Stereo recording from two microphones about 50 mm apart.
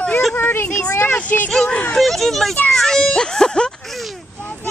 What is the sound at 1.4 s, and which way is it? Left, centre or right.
A child's voice, centre.